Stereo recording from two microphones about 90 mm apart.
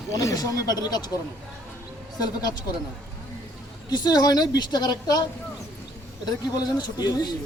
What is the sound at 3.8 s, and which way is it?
A man's voice, 50° left (ahead or behind).